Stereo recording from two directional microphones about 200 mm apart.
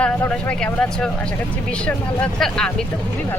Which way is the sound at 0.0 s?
5° left (ahead or behind).